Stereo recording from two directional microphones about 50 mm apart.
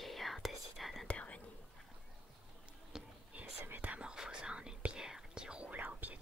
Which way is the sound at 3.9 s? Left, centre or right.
Centre.